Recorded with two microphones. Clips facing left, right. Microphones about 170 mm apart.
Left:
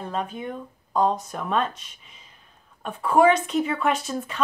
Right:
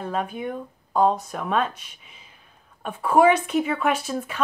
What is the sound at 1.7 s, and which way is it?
Speech, 60° right (ahead or behind).